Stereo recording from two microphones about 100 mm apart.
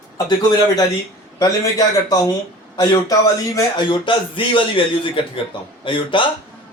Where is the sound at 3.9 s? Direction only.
60° left (ahead or behind).